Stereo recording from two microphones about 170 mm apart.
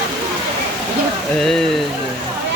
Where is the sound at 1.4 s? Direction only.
Centre (ahead or behind).